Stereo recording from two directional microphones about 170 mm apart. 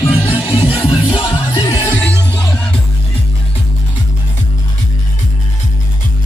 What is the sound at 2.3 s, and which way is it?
Music, 5° left (ahead or behind).